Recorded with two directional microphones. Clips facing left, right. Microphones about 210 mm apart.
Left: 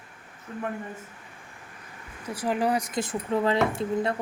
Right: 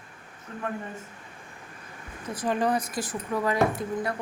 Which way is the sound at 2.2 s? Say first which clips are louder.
Even; 10° left (ahead or behind).